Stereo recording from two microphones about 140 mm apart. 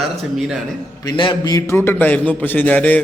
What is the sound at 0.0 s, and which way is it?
Speech, centre (ahead or behind).